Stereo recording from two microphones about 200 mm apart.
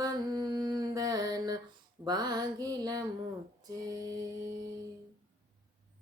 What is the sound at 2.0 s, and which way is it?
Female singing, 20° right (ahead or behind).